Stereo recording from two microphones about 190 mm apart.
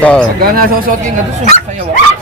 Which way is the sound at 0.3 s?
50° right (ahead or behind).